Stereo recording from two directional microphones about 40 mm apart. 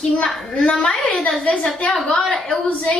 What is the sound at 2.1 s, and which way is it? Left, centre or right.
Speech, centre.